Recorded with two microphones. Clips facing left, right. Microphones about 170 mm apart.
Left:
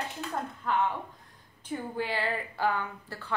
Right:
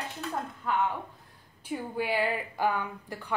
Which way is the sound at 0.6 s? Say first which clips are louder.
Even; 5° right (ahead or behind).